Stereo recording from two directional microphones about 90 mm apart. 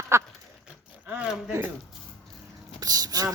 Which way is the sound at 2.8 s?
45° right (ahead or behind).